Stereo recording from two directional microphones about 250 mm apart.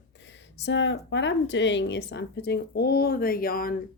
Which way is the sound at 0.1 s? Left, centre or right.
Left.